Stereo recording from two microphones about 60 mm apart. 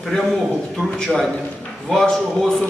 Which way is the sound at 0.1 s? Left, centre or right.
Centre.